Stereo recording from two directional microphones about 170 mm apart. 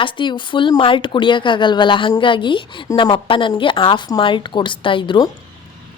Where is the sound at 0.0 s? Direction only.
30° left (ahead or behind).